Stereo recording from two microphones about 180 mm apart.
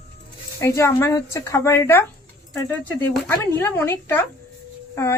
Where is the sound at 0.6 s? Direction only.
15° left (ahead or behind).